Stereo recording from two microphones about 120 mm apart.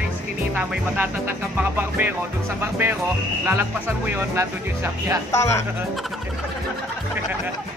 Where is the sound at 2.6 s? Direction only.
20° right (ahead or behind).